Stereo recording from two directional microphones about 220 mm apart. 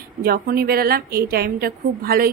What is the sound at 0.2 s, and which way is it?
Speech, 45° right (ahead or behind).